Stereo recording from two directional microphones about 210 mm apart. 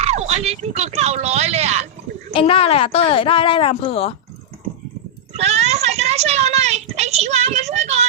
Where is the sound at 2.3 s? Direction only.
25° left (ahead or behind).